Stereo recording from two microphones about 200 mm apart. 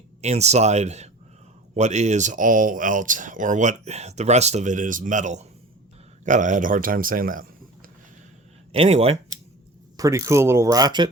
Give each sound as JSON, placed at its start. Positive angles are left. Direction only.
{"t": 0.2, "sound": "a man's voice", "side_deg": -35}
{"t": 8.7, "sound": "speech", "side_deg": -30}
{"t": 10.0, "sound": "speech", "side_deg": -15}